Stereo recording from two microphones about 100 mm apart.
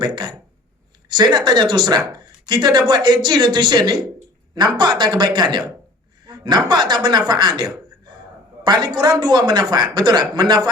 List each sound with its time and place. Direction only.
0.0 s a man's voice: 45° right (ahead or behind)